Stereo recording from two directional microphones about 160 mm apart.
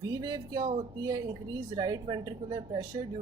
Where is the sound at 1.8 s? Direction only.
25° right (ahead or behind).